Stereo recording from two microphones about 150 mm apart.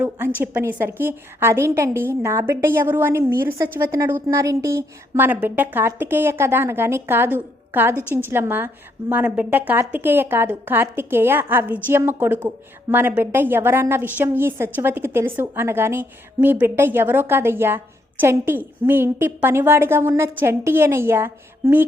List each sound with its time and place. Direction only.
0.0 s a woman's voice: 10° right (ahead or behind)